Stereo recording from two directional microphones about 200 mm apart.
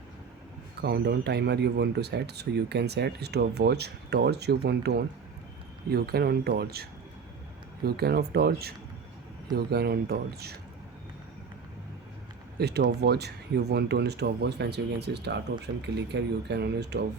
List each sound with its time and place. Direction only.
0.8 s speech: 55° right (ahead or behind)
7.9 s speech: 50° right (ahead or behind)
12.5 s speech: 55° right (ahead or behind)